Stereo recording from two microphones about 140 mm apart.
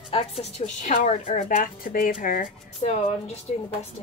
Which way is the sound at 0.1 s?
50° left (ahead or behind).